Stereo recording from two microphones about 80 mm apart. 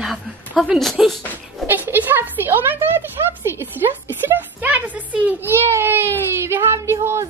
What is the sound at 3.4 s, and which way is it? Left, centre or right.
Speech, right.